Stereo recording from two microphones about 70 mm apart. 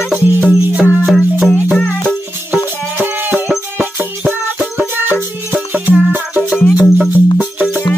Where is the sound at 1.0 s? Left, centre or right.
Centre.